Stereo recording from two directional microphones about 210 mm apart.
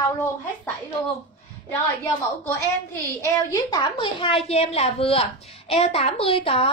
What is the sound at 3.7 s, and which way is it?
A woman's voice, 20° left (ahead or behind).